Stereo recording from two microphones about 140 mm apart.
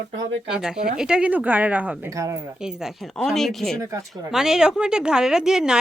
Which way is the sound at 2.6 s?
5° right (ahead or behind).